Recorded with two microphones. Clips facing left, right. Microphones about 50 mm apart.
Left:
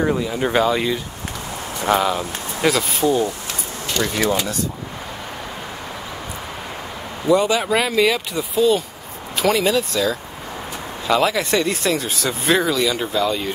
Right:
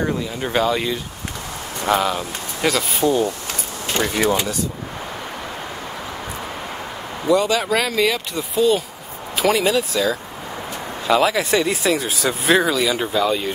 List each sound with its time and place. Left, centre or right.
0.1 s speech: centre
3.9 s speech: right
4.3 s speech: centre
7.2 s speech: centre